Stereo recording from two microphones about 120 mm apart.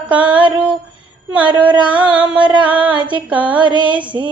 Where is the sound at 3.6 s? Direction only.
40° right (ahead or behind).